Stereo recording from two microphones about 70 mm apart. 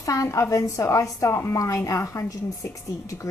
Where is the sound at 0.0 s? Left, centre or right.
Left.